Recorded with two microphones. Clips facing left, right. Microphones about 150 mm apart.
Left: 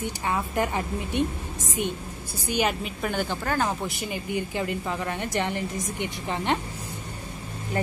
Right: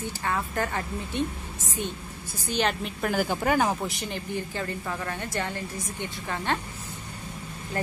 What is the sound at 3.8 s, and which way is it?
A woman's voice, 5° left (ahead or behind).